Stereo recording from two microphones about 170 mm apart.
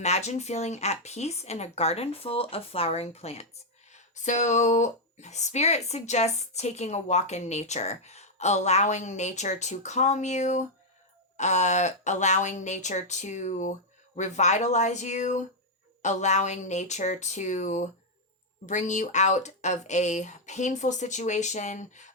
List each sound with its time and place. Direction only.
0.0 s speech: 40° left (ahead or behind)